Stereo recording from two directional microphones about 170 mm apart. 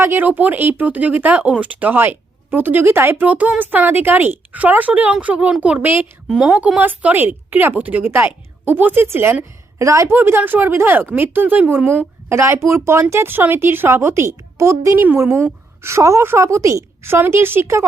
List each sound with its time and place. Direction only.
0.0 s speech: 10° right (ahead or behind)